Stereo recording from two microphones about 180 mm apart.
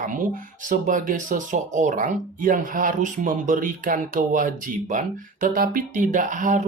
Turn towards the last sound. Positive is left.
turn(degrees=-45)  # may be behind; listen again after turning